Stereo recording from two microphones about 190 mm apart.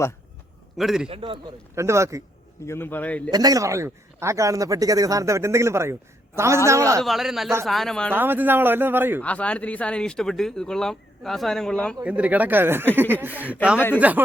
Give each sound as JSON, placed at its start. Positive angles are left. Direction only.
{"t": 0.8, "sound": "speech", "side_deg": 0}
{"t": 1.0, "sound": "a man's voice", "side_deg": -25}
{"t": 1.7, "sound": "a man's voice", "side_deg": -15}
{"t": 2.6, "sound": "a man's voice", "side_deg": 10}
{"t": 3.3, "sound": "a man's voice", "side_deg": -20}
{"t": 7.0, "sound": "speech", "side_deg": 0}
{"t": 8.1, "sound": "a man's voice", "side_deg": -10}
{"t": 9.2, "sound": "speech", "side_deg": 5}
{"t": 12.0, "sound": "a man's voice", "side_deg": -5}